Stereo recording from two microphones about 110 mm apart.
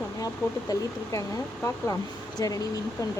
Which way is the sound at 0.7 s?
35° left (ahead or behind).